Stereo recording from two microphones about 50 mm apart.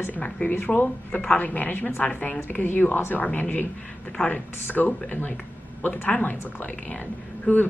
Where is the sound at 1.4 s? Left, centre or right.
Left.